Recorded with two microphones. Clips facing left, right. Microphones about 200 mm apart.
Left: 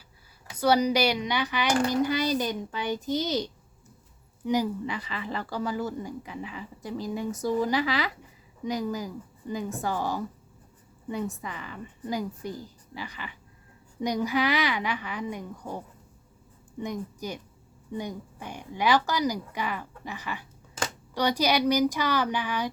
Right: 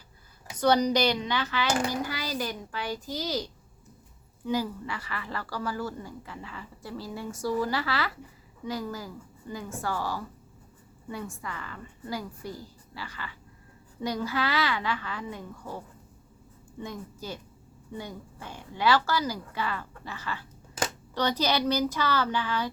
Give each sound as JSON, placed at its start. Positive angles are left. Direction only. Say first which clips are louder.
{"t": 0.5, "sound": "a child's voice", "louder": "even", "side_deg": 10}
{"t": 16.8, "sound": "speech", "louder": "left 5 dB", "side_deg": 15}